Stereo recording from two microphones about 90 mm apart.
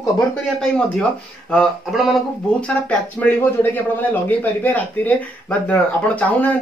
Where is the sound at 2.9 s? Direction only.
15° left (ahead or behind).